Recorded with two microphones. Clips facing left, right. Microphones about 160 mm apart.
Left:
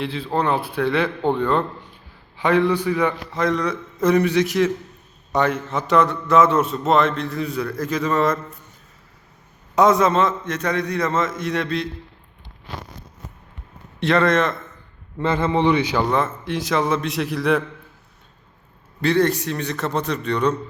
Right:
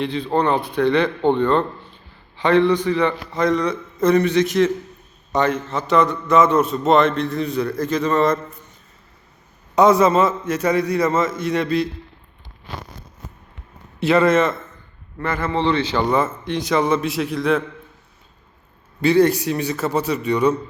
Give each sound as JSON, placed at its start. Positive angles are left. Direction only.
{"t": 0.0, "sound": "a man's voice", "side_deg": 5}
{"t": 9.7, "sound": "a man's voice", "side_deg": 0}
{"t": 14.0, "sound": "a man's voice", "side_deg": -5}
{"t": 15.2, "sound": "a man's voice", "side_deg": 20}
{"t": 16.0, "sound": "a man's voice", "side_deg": 0}
{"t": 19.0, "sound": "a man's voice", "side_deg": -5}